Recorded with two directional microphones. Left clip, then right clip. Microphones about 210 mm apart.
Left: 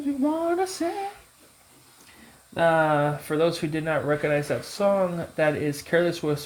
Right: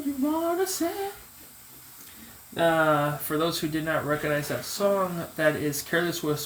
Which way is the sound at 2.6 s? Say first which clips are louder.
Left 2 dB; 45° left (ahead or behind).